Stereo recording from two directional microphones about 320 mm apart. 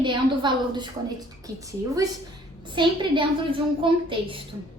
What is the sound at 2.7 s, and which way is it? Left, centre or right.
A woman's voice, centre.